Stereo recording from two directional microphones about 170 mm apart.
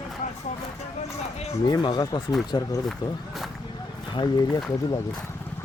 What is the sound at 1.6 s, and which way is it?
Speech, 25° left (ahead or behind).